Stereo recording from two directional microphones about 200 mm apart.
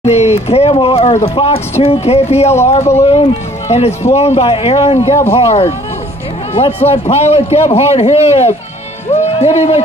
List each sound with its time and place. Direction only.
0.0 s a man's voice: 30° left (ahead or behind)